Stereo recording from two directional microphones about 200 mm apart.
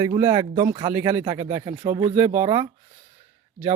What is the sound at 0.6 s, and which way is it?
Speech, 40° right (ahead or behind).